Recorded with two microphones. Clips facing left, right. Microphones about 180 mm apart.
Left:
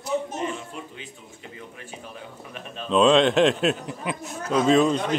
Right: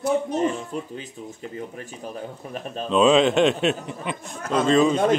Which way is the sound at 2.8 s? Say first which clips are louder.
Right 1 dB; centre (ahead or behind).